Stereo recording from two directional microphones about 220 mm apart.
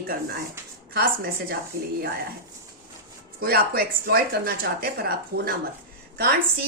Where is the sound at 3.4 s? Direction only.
45° right (ahead or behind).